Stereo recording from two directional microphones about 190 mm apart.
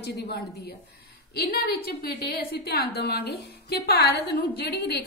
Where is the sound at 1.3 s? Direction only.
55° left (ahead or behind).